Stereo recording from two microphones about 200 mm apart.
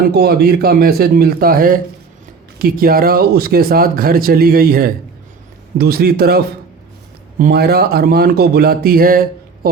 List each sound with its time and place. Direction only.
0.0 s speech: 50° right (ahead or behind)